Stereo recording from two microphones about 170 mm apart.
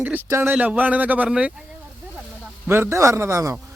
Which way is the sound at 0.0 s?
15° right (ahead or behind).